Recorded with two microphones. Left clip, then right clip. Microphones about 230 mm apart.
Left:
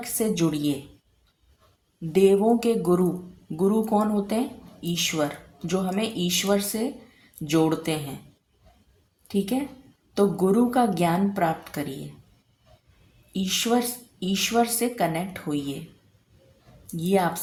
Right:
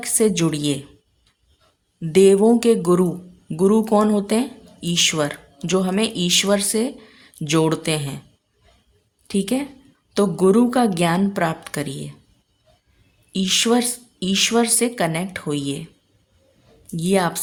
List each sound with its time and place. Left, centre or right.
0.0 s speech: right
2.0 s speech: right
9.2 s a woman's voice: right
13.3 s speech: right
17.0 s speech: right